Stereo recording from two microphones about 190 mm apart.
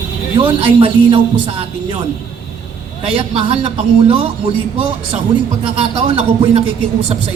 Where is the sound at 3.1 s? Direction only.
30° right (ahead or behind).